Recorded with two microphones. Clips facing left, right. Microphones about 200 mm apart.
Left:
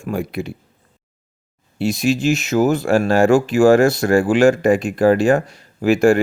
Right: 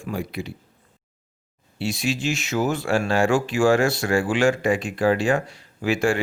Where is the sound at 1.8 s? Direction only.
40° left (ahead or behind).